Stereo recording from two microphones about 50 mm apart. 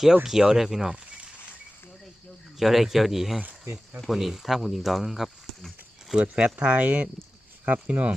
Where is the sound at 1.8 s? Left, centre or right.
Centre.